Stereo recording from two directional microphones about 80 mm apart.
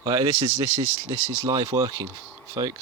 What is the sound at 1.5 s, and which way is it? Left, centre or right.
Speech, right.